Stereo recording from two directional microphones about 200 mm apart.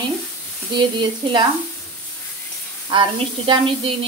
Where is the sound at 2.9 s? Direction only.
25° right (ahead or behind).